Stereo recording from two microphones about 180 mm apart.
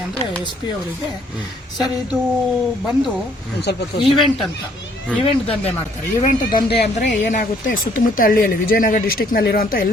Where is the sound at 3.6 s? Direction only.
65° left (ahead or behind).